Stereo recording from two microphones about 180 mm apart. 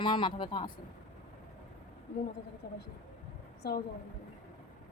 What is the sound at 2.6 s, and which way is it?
Speech, 55° left (ahead or behind).